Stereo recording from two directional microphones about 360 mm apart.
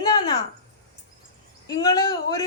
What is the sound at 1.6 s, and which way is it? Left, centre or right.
Speech, centre.